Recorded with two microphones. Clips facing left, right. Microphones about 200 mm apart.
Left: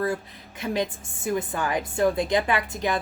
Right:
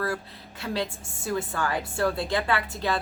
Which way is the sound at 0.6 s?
15° left (ahead or behind).